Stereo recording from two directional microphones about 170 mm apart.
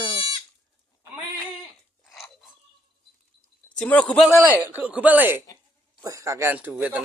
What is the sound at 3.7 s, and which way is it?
Speech, 5° left (ahead or behind).